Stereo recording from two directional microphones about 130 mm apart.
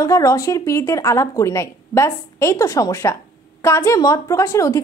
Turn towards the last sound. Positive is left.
turn(degrees=25)  # may be behind; listen again after turning